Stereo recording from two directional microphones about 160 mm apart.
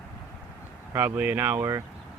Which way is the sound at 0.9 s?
10° right (ahead or behind).